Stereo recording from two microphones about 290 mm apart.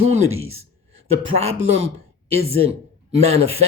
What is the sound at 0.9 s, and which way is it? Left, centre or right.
Speech, right.